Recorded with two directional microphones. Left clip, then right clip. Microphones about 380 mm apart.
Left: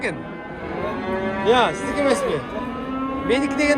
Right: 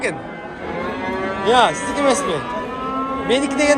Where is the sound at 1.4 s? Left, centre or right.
Centre.